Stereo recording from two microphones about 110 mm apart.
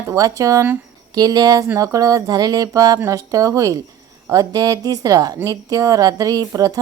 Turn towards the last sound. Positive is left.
turn(degrees=-30)  # may be behind; listen again after turning